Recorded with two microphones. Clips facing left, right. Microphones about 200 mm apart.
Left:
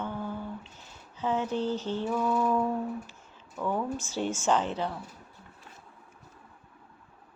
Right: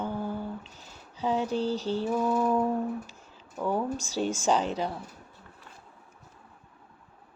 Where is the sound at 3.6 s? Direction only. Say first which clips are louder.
Right 2 dB; 10° right (ahead or behind).